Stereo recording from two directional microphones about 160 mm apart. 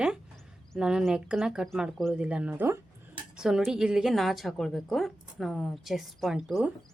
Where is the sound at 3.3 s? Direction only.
5° right (ahead or behind).